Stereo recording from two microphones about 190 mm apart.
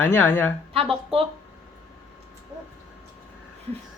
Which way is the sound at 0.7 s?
30° right (ahead or behind).